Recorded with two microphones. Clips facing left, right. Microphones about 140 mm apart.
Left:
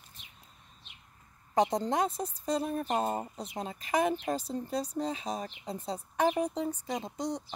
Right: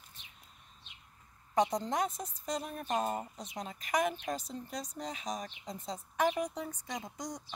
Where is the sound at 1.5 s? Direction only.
30° left (ahead or behind).